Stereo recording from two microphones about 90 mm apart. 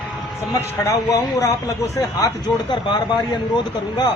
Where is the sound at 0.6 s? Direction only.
35° left (ahead or behind).